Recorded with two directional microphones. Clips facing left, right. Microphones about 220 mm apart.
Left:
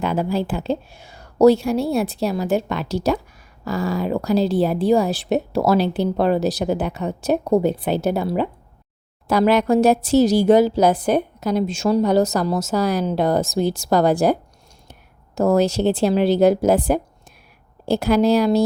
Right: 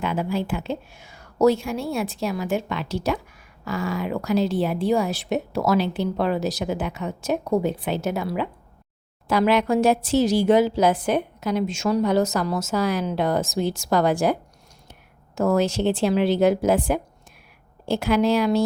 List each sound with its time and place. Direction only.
0.0 s speech: 35° left (ahead or behind)
15.4 s speech: 35° left (ahead or behind)